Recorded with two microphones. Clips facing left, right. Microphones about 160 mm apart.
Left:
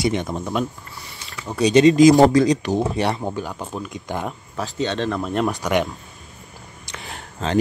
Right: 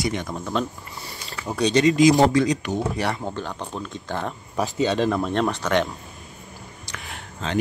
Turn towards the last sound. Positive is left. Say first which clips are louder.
# left 4 dB
turn(degrees=35)  # may be behind; listen again after turning